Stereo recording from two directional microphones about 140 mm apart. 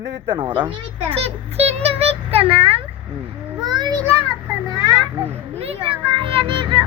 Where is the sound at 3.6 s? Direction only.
30° right (ahead or behind).